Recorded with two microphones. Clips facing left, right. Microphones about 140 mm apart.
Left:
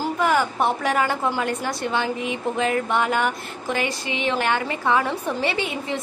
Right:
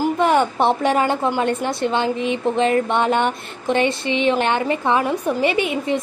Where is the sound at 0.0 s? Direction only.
25° right (ahead or behind).